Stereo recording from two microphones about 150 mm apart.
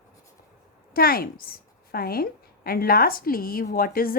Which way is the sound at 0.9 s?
80° left.